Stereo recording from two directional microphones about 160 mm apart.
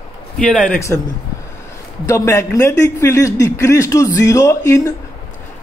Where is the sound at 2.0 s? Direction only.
20° left (ahead or behind).